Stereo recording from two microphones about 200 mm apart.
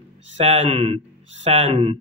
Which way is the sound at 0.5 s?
30° right (ahead or behind).